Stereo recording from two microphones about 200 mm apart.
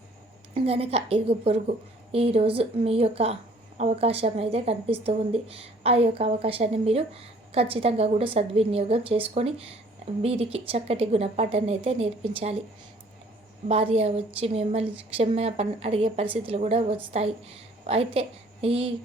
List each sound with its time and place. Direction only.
0.5 s speech: 30° right (ahead or behind)
13.7 s a woman's voice: 30° right (ahead or behind)